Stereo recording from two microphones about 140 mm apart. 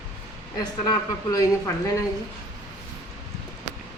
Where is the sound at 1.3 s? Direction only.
25° left (ahead or behind).